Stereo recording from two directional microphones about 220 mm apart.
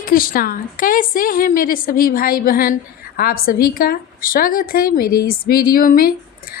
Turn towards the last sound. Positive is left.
turn(degrees=40)  # may be behind; listen again after turning